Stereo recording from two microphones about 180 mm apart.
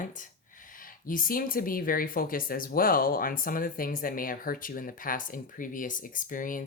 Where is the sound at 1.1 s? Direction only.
50° left (ahead or behind).